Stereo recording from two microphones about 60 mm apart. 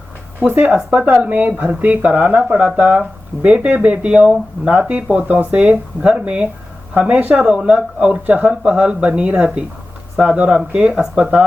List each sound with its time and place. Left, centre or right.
0.3 s speech: right